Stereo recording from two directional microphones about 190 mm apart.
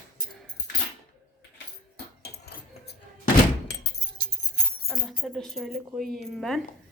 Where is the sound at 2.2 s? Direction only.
55° left (ahead or behind).